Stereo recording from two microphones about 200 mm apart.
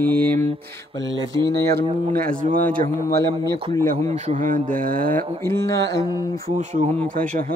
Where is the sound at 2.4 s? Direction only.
40° right (ahead or behind).